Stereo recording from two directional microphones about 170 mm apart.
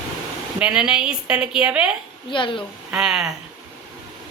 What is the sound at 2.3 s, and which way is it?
Speech, 30° left (ahead or behind).